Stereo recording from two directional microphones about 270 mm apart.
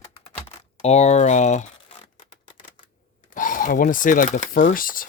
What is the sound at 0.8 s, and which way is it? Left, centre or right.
Speech, left.